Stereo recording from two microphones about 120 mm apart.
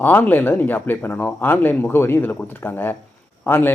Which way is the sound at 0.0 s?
15° left (ahead or behind).